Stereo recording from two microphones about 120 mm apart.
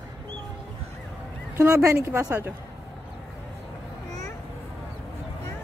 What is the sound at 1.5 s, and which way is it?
Speech, 25° right (ahead or behind).